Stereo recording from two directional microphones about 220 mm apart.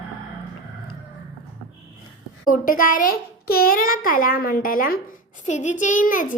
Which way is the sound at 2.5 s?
40° left (ahead or behind).